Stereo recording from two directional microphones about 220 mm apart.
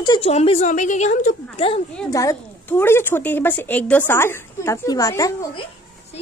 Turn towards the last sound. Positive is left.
turn(degrees=20)  # may be behind; listen again after turning